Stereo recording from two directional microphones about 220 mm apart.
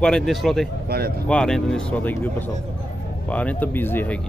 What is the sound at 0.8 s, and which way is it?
Speech, 45° right (ahead or behind).